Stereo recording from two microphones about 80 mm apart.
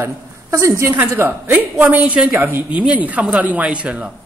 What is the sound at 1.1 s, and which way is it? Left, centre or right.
A man's voice, right.